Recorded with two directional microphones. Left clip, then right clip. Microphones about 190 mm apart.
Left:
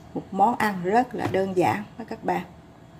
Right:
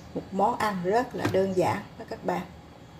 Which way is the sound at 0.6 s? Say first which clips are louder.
Left 3 dB; 45° left (ahead or behind).